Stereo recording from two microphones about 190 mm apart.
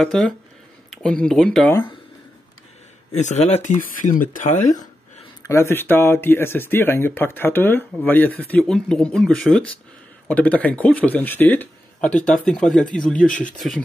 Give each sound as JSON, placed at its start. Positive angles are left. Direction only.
{"t": 0.0, "sound": "speech", "side_deg": 5}
{"t": 1.7, "sound": "speech", "side_deg": 20}
{"t": 3.2, "sound": "speech", "side_deg": 35}
{"t": 5.5, "sound": "speech", "side_deg": 15}